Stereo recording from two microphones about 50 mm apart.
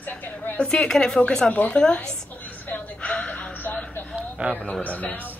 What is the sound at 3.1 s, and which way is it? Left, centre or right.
Gasp, left.